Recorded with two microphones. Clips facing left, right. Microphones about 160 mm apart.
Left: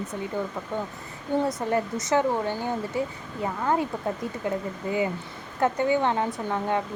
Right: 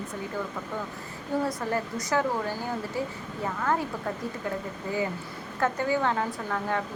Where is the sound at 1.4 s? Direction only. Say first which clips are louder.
Left 4 dB; 20° left (ahead or behind).